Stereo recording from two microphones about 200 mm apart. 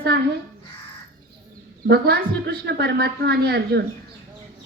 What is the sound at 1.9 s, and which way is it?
A woman's voice, 55° right (ahead or behind).